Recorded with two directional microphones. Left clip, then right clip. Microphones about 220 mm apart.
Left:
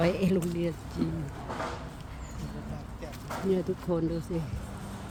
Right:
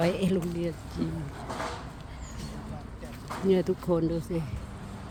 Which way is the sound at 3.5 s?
25° right (ahead or behind).